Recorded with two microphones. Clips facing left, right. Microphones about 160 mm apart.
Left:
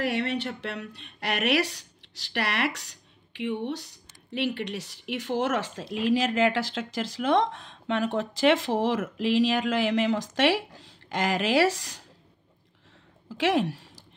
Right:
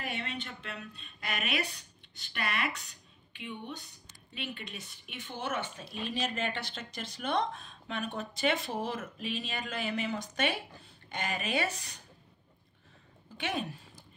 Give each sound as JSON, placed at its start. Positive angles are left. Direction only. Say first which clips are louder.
{"t": 0.0, "sound": "a woman's voice", "louder": "left 11 dB", "side_deg": 75}
{"t": 13.3, "sound": "speech", "louder": "left 11 dB", "side_deg": 90}